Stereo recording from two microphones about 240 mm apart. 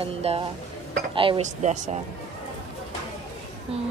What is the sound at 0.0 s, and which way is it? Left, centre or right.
A woman's voice, right.